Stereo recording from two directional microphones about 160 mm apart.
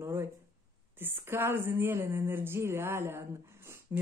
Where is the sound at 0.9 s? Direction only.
10° right (ahead or behind).